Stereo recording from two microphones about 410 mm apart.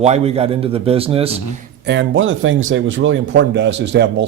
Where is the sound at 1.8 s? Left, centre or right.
Right.